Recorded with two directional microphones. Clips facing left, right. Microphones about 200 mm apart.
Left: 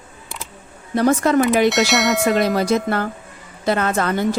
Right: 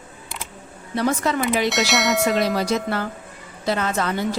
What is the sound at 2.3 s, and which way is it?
A woman's voice, 55° left (ahead or behind).